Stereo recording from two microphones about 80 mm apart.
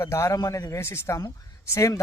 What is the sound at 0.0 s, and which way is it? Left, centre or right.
Speech, left.